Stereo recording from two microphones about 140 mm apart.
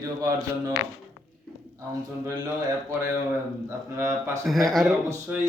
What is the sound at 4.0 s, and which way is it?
Speech, 15° right (ahead or behind).